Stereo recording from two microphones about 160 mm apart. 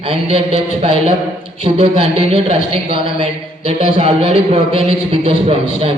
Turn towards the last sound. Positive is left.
turn(degrees=-40)  # may be behind; listen again after turning